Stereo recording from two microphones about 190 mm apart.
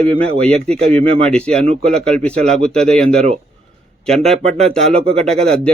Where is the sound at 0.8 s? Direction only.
30° right (ahead or behind).